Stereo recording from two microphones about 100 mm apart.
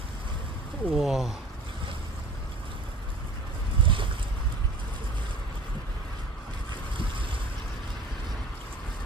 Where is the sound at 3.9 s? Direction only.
55° right (ahead or behind).